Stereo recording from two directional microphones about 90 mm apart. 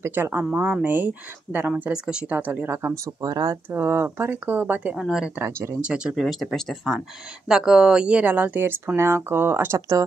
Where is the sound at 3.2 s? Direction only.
45° right (ahead or behind).